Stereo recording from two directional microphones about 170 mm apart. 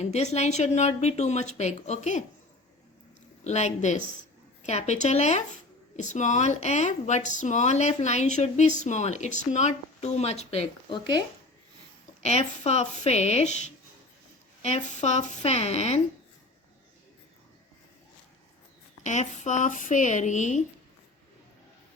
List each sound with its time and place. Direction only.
0.0 s speech: 40° left (ahead or behind)
3.4 s speech: 40° left (ahead or behind)
12.2 s speech: 40° left (ahead or behind)
14.6 s speech: 40° left (ahead or behind)
19.0 s speech: 45° left (ahead or behind)